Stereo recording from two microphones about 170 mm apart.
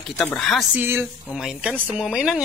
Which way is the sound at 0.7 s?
10° right (ahead or behind).